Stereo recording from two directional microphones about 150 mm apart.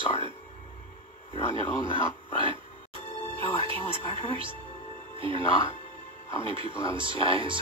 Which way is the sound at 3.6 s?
35° right (ahead or behind).